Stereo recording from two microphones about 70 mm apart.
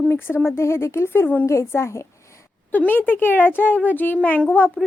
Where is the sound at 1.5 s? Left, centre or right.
Left.